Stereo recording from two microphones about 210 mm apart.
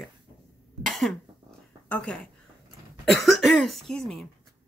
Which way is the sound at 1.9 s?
5° left (ahead or behind).